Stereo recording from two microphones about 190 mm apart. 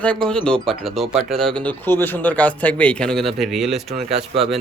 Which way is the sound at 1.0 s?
30° right (ahead or behind).